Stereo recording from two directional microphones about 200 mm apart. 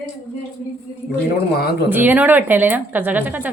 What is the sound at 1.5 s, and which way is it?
Speech, 50° left (ahead or behind).